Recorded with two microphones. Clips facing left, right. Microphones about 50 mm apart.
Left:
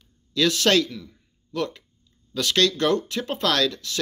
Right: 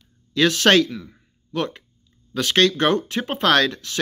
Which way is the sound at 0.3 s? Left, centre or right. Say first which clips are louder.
Right 4 dB; right.